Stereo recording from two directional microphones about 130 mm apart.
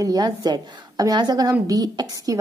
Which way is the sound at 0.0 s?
30° right (ahead or behind).